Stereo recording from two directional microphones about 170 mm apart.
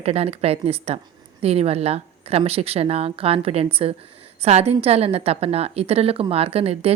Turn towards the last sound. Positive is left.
turn(degrees=-35)  # may be behind; listen again after turning